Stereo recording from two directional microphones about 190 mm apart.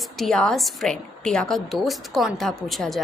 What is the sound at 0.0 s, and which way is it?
A woman's voice, centre (ahead or behind).